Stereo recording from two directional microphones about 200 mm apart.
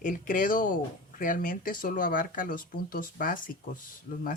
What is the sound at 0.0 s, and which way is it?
Speech, 40° left (ahead or behind).